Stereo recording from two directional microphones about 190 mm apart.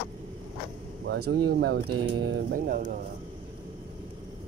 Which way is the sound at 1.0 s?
60° right (ahead or behind).